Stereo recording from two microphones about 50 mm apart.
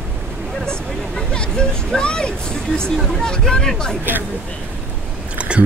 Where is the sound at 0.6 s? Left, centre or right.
Centre.